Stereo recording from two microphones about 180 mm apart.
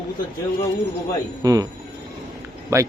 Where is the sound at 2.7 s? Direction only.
15° right (ahead or behind).